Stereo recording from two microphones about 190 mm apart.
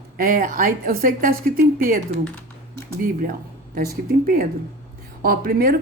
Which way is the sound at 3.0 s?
50° right (ahead or behind).